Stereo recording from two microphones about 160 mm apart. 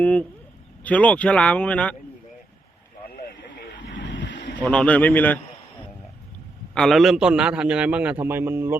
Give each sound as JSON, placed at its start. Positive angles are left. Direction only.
{"t": 0.0, "sound": "speech", "side_deg": 10}
{"t": 3.1, "sound": "vehicle", "side_deg": 75}
{"t": 4.6, "sound": "speech", "side_deg": 5}
{"t": 6.7, "sound": "a man's voice", "side_deg": 0}